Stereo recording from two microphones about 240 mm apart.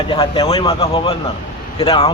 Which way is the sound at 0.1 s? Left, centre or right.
Left.